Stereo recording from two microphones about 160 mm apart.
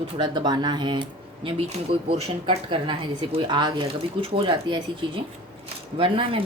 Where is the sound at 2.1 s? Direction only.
30° right (ahead or behind).